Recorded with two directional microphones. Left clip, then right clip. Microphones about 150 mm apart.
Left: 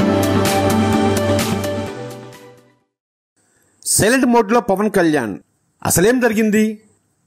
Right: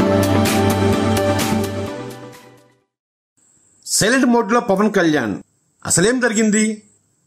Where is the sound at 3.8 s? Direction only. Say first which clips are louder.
Left 1 dB; 45° left (ahead or behind).